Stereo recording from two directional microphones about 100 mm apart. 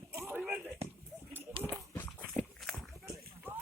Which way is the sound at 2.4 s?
Centre (ahead or behind).